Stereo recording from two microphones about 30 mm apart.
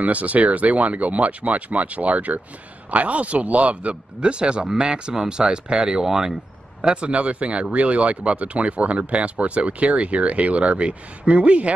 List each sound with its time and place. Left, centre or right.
0.0 s speech: right
4.2 s speech: right; by 6.3 s centre
6.8 s speech: right